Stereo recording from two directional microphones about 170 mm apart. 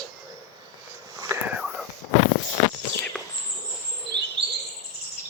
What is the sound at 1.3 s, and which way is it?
Whispering, 15° right (ahead or behind).